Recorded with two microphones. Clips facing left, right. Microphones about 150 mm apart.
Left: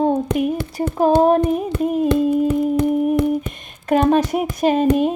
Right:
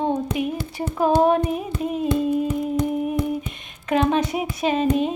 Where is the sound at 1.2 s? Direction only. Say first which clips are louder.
Left 4 dB; 45° left (ahead or behind).